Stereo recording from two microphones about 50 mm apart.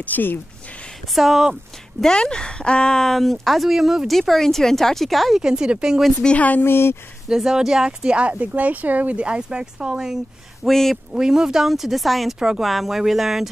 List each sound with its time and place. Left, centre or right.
0.0 s speech: left
1.1 s speech: centre
2.1 s speech: centre
4.1 s speech: centre
5.4 s speech: centre
6.2 s speech: left
6.6 s speech: left
7.2 s speech: centre
10.7 s speech: centre
11.1 s speech: centre
12.4 s speech: centre
12.6 s speech: centre